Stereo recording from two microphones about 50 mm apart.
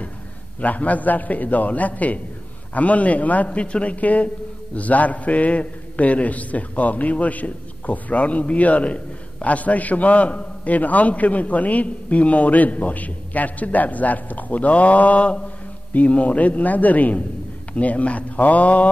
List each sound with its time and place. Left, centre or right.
0.6 s a man's voice: left